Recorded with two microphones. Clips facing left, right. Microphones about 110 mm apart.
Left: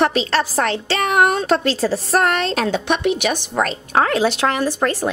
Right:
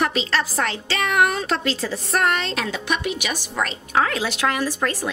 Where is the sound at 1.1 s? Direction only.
40° left (ahead or behind).